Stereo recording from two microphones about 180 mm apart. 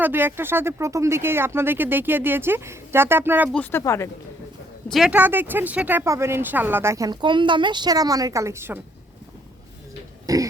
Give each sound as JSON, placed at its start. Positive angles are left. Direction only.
{"t": 0.0, "sound": "speech", "side_deg": -10}
{"t": 3.5, "sound": "speech", "side_deg": 10}
{"t": 4.9, "sound": "speech", "side_deg": 0}
{"t": 10.2, "sound": "a sound", "side_deg": -20}